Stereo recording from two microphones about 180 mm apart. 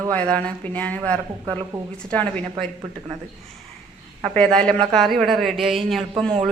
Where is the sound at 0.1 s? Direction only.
10° left (ahead or behind).